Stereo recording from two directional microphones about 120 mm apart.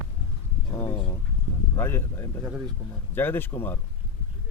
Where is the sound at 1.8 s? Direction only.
20° left (ahead or behind).